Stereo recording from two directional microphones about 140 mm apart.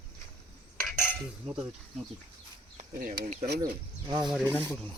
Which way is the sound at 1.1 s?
5° right (ahead or behind).